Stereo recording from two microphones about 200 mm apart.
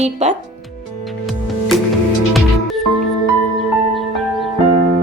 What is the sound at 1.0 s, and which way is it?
Music, centre (ahead or behind).